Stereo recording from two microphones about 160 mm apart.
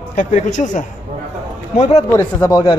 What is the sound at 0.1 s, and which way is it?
Speech, 50° left (ahead or behind).